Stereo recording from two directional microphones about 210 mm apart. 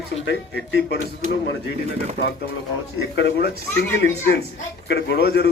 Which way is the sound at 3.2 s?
50° left (ahead or behind).